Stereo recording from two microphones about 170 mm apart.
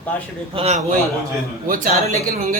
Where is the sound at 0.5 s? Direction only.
35° right (ahead or behind).